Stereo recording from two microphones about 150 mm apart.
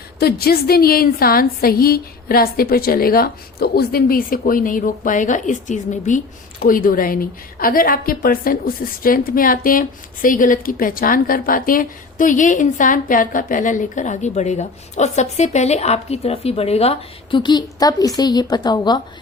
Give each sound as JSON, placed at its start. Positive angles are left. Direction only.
{"t": 0.2, "sound": "a woman's voice", "side_deg": 90}